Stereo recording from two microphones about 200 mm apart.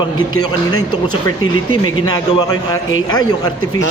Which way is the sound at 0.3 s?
90° left.